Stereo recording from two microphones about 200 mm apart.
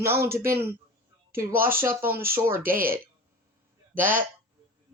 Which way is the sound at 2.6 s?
45° right (ahead or behind).